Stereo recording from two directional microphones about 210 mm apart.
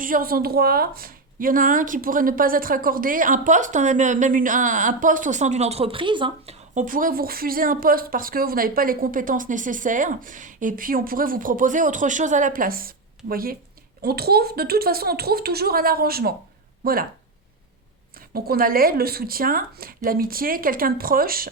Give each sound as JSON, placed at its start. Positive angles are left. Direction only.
{"t": 0.0, "sound": "a woman's voice", "side_deg": -40}
{"t": 18.3, "sound": "a woman's voice", "side_deg": -45}